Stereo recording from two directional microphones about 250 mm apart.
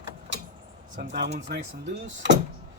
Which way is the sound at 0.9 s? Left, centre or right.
Right.